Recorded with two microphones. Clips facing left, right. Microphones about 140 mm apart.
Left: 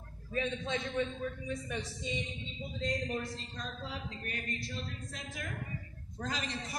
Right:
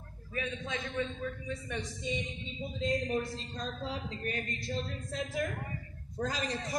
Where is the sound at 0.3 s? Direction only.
25° left (ahead or behind).